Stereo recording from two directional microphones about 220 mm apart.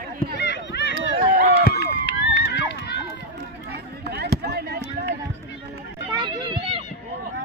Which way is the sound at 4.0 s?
45° right (ahead or behind).